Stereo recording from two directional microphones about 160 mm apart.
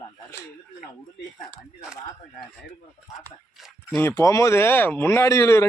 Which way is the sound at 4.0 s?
20° left (ahead or behind).